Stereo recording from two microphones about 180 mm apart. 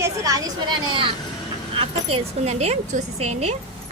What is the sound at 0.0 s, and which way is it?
A woman's voice, 20° right (ahead or behind).